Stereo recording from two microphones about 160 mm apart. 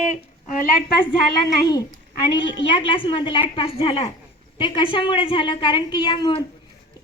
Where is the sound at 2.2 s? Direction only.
30° left (ahead or behind).